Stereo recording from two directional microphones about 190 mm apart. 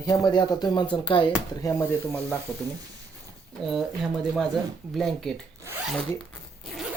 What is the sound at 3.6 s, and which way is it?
Speech, centre (ahead or behind).